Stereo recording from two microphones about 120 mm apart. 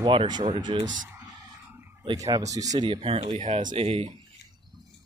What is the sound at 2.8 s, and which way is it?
Speech, 45° right (ahead or behind).